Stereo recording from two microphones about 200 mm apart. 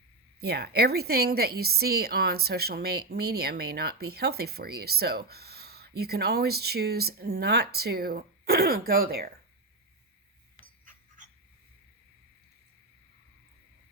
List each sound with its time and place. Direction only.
0.3 s a woman's voice: 55° right (ahead or behind)
10.6 s pant: 40° right (ahead or behind)